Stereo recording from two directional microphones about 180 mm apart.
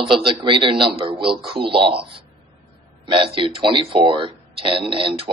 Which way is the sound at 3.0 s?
30° right (ahead or behind).